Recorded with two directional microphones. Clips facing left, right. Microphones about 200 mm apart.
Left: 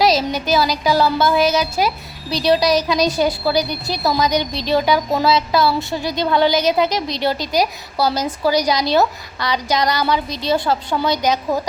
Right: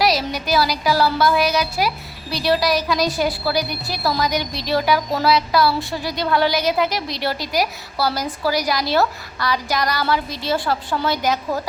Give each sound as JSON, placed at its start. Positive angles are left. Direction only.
{"t": 0.0, "sound": "a woman's voice", "side_deg": 20}